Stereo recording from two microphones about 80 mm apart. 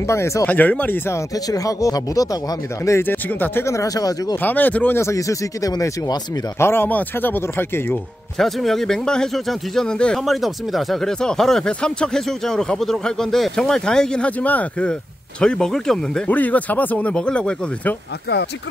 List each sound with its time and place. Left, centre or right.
0.0 s speech: left
0.5 s speech: left
1.3 s speech: left
3.0 s speech: left
3.6 s speech: left
4.4 s speech: left
5.0 s speech: left
6.6 s speech: left
8.4 s speech: centre
10.2 s speech: centre
16.3 s speech: centre